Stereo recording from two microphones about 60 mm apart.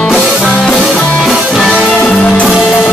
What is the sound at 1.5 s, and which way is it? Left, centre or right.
Music, centre.